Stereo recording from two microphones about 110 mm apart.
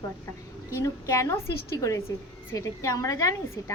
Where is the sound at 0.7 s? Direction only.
30° left (ahead or behind).